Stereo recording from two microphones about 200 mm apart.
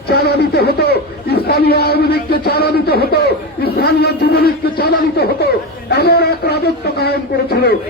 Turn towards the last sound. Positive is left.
turn(degrees=55)  # may be behind; listen again after turning